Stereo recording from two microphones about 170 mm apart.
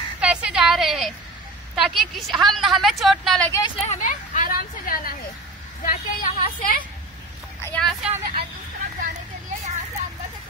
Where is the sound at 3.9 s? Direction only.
50° left (ahead or behind).